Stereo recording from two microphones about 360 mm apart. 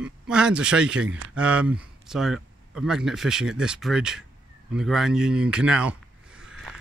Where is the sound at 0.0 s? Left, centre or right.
Centre.